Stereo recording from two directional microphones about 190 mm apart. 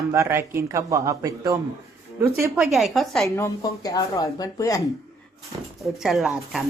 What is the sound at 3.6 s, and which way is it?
Speech, 20° left (ahead or behind).